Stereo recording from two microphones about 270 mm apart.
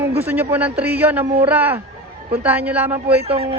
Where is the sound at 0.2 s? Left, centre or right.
Centre.